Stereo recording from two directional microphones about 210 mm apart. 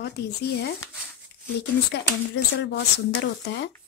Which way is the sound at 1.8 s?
55° left (ahead or behind).